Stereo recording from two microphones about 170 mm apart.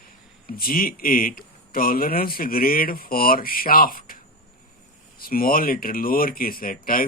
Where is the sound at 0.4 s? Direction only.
60° left (ahead or behind).